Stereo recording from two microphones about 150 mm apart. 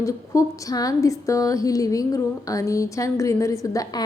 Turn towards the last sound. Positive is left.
turn(degrees=25)  # may be behind; listen again after turning